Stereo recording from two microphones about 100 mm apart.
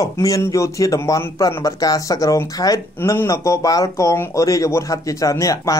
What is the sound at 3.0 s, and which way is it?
Speech, 25° left (ahead or behind).